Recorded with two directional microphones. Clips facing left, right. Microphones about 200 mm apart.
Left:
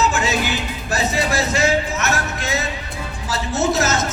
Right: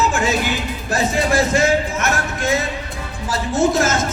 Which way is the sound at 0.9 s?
50° right (ahead or behind).